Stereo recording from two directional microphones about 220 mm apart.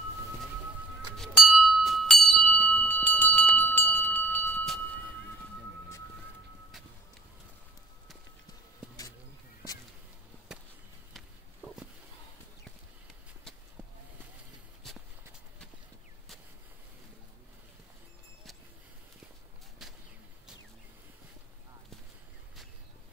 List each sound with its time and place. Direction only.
1.1 s bell: centre (ahead or behind)
3.5 s a sound: 10° left (ahead or behind)
11.1 s walk: centre (ahead or behind)
14.8 s walk: centre (ahead or behind)
19.8 s bird: centre (ahead or behind)